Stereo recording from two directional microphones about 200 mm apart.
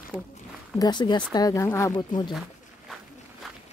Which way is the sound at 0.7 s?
20° left (ahead or behind).